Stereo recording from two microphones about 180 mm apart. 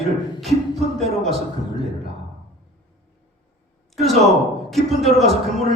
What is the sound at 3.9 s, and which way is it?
A man's voice, centre (ahead or behind).